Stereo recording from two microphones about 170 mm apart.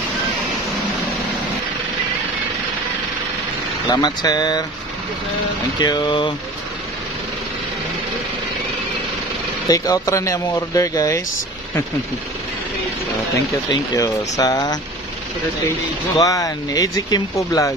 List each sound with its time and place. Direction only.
3.9 s speech: 25° left (ahead or behind)
5.8 s speech: 25° left (ahead or behind)
9.7 s speech: 20° left (ahead or behind)
13.7 s speech: 20° left (ahead or behind)
16.2 s speech: 20° left (ahead or behind)